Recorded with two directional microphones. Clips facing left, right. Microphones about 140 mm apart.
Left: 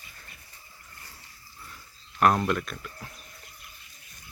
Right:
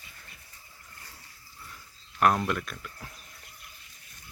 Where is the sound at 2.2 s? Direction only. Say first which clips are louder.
Left 2 dB; centre (ahead or behind).